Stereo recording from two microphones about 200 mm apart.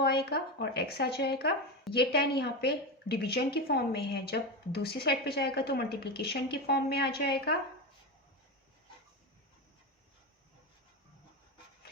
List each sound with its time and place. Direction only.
0.0 s a woman's voice: 55° left (ahead or behind)